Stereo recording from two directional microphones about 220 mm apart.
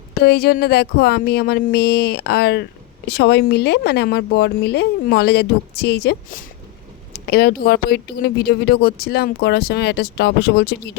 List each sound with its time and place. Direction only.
0.1 s speech: 45° left (ahead or behind)